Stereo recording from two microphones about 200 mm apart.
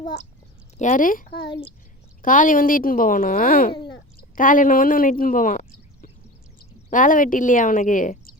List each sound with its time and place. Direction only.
0.8 s a woman's voice: 40° left (ahead or behind)